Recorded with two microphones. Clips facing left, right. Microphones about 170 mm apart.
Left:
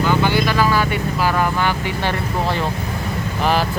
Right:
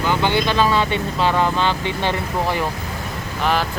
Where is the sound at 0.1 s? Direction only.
20° right (ahead or behind).